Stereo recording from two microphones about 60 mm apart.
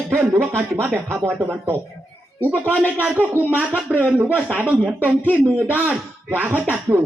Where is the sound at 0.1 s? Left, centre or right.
Right.